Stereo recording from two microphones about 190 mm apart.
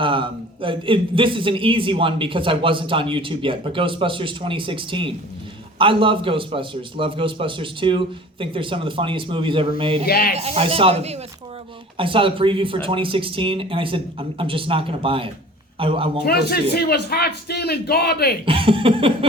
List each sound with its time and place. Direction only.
0.0 s a man's voice: 25° right (ahead or behind)
10.1 s a man's voice: 55° left (ahead or behind)
10.3 s a man's voice: 30° right (ahead or behind)
16.7 s a man's voice: 55° left (ahead or behind)
18.4 s a man's voice: 30° right (ahead or behind)